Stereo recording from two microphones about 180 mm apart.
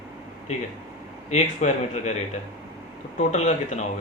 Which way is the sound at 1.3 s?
40° left (ahead or behind).